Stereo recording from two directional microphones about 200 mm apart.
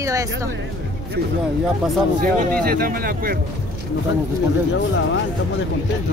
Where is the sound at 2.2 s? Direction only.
45° right (ahead or behind).